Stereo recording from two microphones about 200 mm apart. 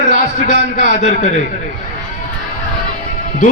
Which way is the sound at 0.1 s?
40° left (ahead or behind).